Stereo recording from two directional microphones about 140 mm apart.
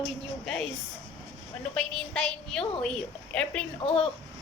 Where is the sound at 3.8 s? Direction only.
45° left (ahead or behind).